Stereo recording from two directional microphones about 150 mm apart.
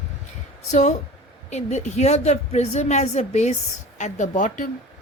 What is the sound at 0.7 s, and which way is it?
A woman's voice, 50° left (ahead or behind).